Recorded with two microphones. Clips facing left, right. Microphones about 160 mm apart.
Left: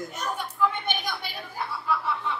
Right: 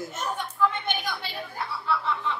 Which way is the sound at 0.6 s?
10° left (ahead or behind).